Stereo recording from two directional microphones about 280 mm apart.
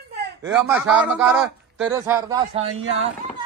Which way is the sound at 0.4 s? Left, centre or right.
Centre.